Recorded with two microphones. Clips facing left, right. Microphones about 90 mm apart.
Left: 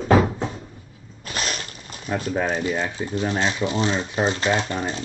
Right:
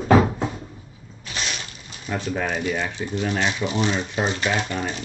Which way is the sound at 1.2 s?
45° left (ahead or behind).